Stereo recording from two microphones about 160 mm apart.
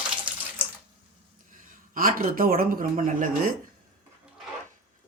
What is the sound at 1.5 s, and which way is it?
Speech, 55° right (ahead or behind).